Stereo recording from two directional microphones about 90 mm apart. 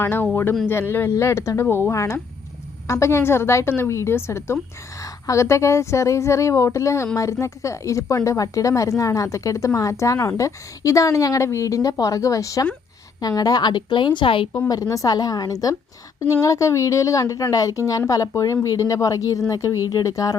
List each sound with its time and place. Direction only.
0.0 s a woman's voice: 25° left (ahead or behind); by 14.4 s 70° left (ahead or behind)
14.7 s a woman's voice: 40° left (ahead or behind)